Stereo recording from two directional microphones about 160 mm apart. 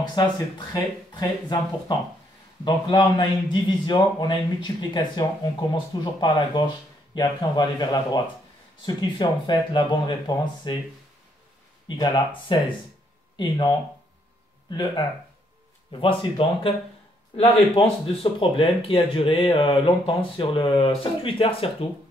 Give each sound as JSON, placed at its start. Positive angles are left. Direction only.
{"t": 0.0, "sound": "a man's voice", "side_deg": 30}
{"t": 2.6, "sound": "a man's voice", "side_deg": 25}
{"t": 12.0, "sound": "a man's voice", "side_deg": 30}